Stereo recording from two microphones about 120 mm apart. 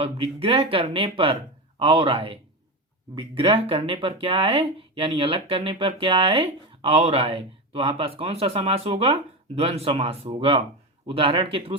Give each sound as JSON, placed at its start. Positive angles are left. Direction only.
{"t": 0.0, "sound": "speech", "side_deg": -55}